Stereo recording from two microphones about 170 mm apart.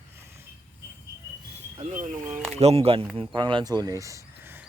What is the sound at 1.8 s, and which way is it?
Speech, 50° right (ahead or behind).